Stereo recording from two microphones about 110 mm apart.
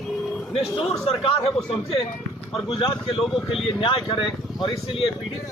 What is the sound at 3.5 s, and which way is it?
A man's voice, 55° left (ahead or behind).